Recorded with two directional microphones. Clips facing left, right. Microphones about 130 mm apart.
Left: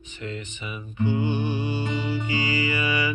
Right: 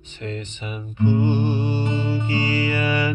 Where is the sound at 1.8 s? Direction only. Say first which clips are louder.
Right 3 dB; 20° right (ahead or behind).